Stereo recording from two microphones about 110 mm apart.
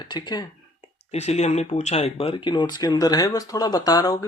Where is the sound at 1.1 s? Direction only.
85° left.